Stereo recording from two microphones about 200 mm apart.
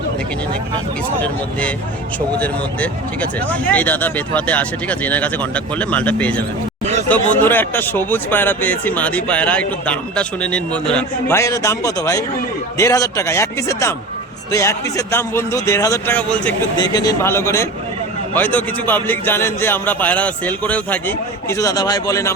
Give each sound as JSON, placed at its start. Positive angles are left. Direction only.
{"t": 1.2, "sound": "a man's voice", "side_deg": 5}
{"t": 16.7, "sound": "a man's voice", "side_deg": 20}